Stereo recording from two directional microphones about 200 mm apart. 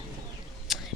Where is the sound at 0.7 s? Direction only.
Centre (ahead or behind).